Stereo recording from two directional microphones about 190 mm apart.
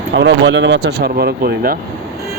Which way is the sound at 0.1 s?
70° right (ahead or behind).